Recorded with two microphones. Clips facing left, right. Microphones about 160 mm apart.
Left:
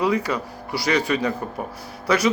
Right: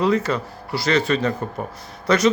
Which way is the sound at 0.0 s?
10° left (ahead or behind).